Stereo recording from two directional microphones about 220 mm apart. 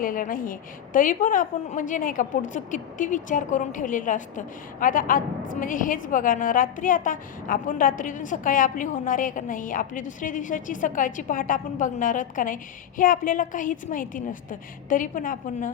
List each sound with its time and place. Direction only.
0.0 s a woman's voice: 40° left (ahead or behind)